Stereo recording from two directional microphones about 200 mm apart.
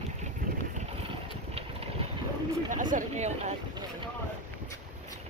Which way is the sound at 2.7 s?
40° right (ahead or behind).